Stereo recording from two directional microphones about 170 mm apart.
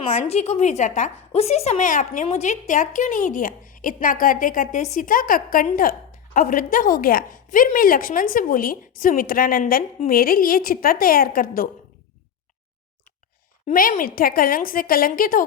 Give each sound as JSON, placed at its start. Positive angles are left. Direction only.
{"t": 0.0, "sound": "a woman's voice", "side_deg": 40}
{"t": 13.7, "sound": "a woman's voice", "side_deg": 55}